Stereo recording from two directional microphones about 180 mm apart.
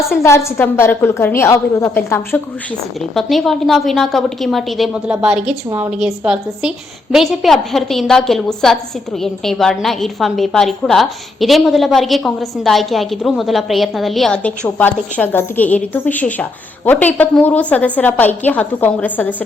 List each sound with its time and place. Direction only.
0.2 s a woman's voice: 15° left (ahead or behind)
3.2 s a woman's voice: centre (ahead or behind)